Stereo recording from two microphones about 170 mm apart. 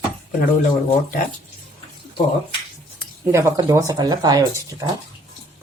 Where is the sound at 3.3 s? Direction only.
15° right (ahead or behind).